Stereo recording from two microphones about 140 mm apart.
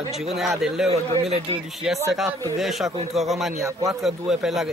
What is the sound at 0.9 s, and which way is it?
Speech, 45° right (ahead or behind).